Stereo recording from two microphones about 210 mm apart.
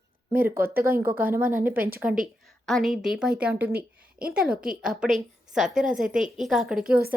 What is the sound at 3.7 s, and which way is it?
Speech, 45° right (ahead or behind).